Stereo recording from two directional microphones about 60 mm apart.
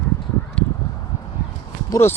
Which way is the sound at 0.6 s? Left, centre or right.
Centre.